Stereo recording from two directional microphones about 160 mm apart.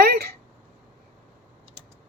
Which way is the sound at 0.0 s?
80° right.